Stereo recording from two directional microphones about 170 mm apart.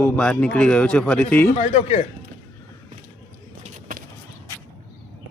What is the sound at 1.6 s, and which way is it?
Speech, 40° left (ahead or behind).